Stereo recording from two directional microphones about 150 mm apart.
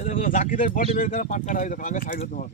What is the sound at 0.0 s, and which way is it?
Speech, 55° left (ahead or behind).